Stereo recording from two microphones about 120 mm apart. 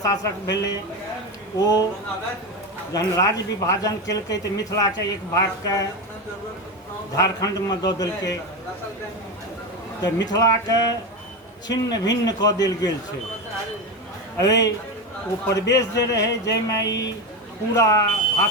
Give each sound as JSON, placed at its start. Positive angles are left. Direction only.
{"t": 0.0, "sound": "speech", "side_deg": 30}
{"t": 2.9, "sound": "speech", "side_deg": 30}
{"t": 7.2, "sound": "speech", "side_deg": 30}
{"t": 10.3, "sound": "speech", "side_deg": 30}
{"t": 14.3, "sound": "speech", "side_deg": 30}